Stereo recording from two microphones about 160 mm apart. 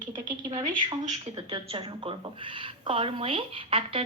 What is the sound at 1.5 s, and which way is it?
A woman's voice, 30° right (ahead or behind).